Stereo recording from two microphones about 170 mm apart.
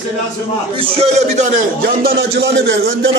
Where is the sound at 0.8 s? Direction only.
35° right (ahead or behind).